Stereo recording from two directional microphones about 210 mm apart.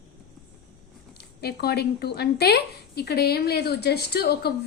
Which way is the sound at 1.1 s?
50° left (ahead or behind).